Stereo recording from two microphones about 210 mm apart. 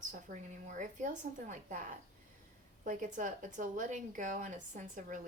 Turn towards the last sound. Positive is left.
turn(degrees=-40)  # may be behind; listen again after turning